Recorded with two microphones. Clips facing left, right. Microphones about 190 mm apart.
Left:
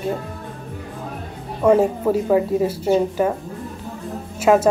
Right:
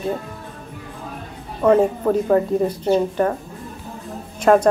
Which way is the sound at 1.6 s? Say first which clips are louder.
Even; 10° left (ahead or behind).